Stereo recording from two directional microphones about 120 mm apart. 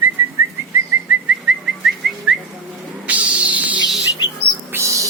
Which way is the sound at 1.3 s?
10° right (ahead or behind).